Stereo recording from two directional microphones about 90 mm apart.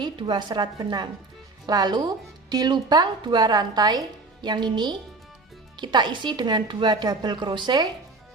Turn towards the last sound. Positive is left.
turn(degrees=-60)  # may be behind; listen again after turning